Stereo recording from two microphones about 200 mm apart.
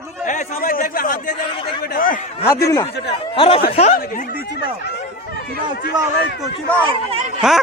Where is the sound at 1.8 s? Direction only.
50° left (ahead or behind).